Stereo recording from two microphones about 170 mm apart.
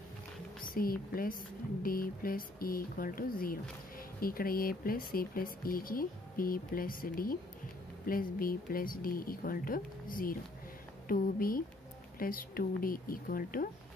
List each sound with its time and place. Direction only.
0.6 s speech: 55° left (ahead or behind)